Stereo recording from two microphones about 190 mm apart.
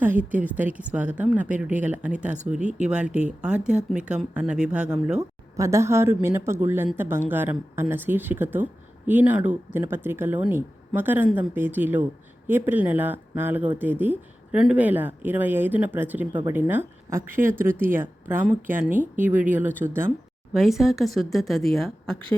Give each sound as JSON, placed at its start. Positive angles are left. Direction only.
{"t": 0.0, "sound": "speech", "side_deg": -10}
{"t": 2.6, "sound": "speech", "side_deg": -40}
{"t": 2.9, "sound": "speech", "side_deg": -5}
{"t": 5.5, "sound": "speech", "side_deg": -15}
{"t": 20.5, "sound": "speech", "side_deg": 0}